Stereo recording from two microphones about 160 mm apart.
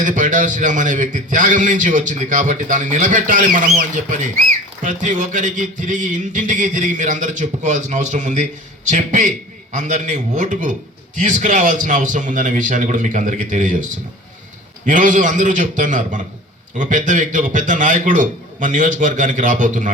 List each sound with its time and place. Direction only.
0.0 s speech: 55° right (ahead or behind)
4.8 s speech: 50° right (ahead or behind)
14.8 s speech: 55° right (ahead or behind)